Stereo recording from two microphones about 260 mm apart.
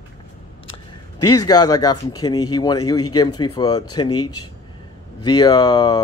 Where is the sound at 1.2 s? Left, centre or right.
Left.